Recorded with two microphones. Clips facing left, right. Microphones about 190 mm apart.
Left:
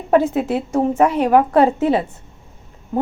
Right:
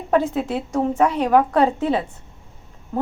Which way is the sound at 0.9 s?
5° left (ahead or behind).